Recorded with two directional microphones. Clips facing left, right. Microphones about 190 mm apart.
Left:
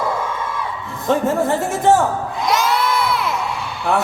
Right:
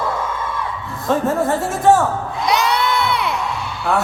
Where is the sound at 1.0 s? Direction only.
20° left (ahead or behind).